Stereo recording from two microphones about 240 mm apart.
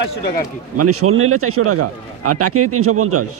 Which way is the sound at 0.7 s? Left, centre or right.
Right.